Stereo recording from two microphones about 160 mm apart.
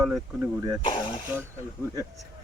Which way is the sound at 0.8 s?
35° left (ahead or behind).